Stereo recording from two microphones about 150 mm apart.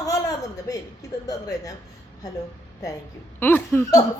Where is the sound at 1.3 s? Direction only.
20° left (ahead or behind).